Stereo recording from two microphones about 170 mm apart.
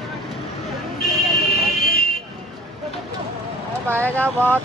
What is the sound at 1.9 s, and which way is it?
Vehicle, 60° left (ahead or behind).